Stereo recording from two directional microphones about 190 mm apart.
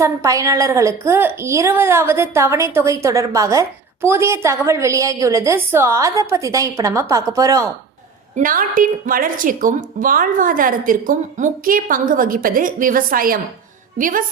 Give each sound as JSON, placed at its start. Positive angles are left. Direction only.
{"t": 0.0, "sound": "a woman's voice", "side_deg": -15}
{"t": 8.4, "sound": "a woman's voice", "side_deg": -45}